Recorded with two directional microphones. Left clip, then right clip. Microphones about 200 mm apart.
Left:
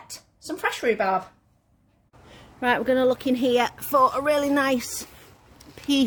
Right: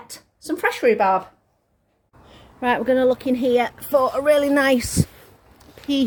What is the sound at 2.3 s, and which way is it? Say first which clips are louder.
A woman's voice: right 2 dB; centre (ahead or behind).